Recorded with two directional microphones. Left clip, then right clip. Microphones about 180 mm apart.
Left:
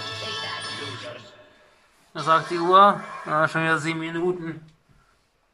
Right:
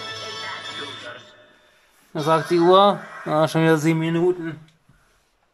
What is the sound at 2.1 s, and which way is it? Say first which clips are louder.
Speech: right 2 dB; 30° right (ahead or behind).